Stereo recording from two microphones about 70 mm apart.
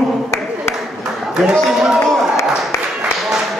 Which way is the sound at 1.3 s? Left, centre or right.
Centre.